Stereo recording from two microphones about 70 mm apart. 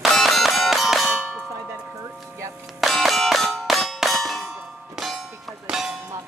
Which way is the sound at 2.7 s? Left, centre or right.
Centre.